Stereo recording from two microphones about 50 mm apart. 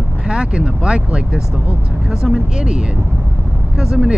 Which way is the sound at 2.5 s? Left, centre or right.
Centre.